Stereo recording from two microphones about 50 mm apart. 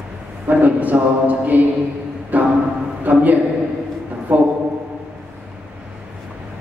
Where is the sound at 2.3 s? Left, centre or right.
Right.